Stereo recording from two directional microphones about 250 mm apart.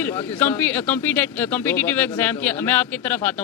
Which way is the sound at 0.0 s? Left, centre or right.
Centre.